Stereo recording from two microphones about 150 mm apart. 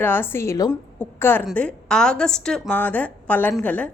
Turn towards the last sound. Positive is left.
turn(degrees=10)  # may be behind; listen again after turning